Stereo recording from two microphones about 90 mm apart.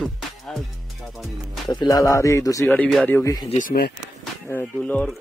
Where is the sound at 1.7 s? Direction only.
55° left (ahead or behind).